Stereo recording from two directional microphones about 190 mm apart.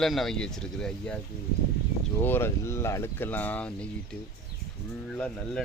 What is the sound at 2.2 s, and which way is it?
Speech, 10° left (ahead or behind).